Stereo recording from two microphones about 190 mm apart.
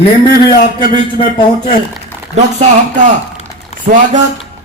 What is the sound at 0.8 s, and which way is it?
Speech, 45° left (ahead or behind).